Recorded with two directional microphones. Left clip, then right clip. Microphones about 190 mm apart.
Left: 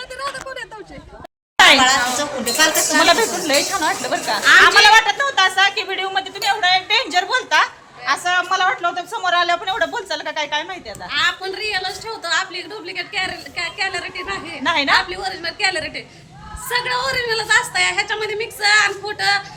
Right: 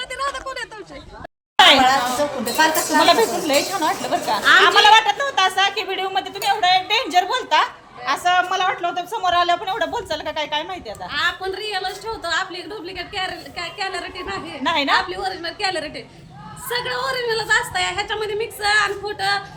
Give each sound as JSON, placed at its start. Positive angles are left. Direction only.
{"t": 1.5, "sound": "a sound", "side_deg": 5}
{"t": 2.4, "sound": "a woman's voice", "side_deg": -40}
{"t": 3.0, "sound": "speech", "side_deg": 5}
{"t": 11.1, "sound": "a woman's voice", "side_deg": -10}
{"t": 14.6, "sound": "speech", "side_deg": 5}
{"t": 14.9, "sound": "a woman's voice", "side_deg": -15}